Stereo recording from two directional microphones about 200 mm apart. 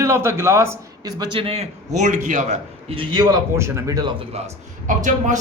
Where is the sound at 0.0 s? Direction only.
15° right (ahead or behind).